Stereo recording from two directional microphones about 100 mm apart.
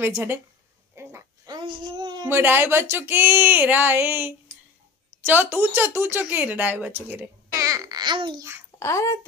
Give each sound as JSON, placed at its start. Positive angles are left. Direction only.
{"t": 0.0, "sound": "speech", "side_deg": -25}
{"t": 0.9, "sound": "a sound", "side_deg": -25}
{"t": 1.5, "sound": "a sound", "side_deg": -45}
{"t": 2.2, "sound": "speech", "side_deg": -20}
{"t": 7.5, "sound": "babbling", "side_deg": -35}
{"t": 8.4, "sound": "speech", "side_deg": -25}
{"t": 8.7, "sound": "speech", "side_deg": 30}